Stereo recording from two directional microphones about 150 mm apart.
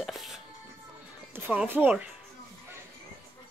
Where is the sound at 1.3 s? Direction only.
15° right (ahead or behind).